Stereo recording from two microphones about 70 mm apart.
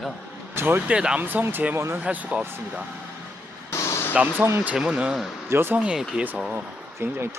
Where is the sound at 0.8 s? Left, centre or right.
Centre.